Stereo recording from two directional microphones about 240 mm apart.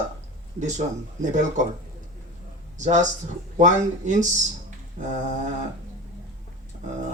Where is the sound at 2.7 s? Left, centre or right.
Right.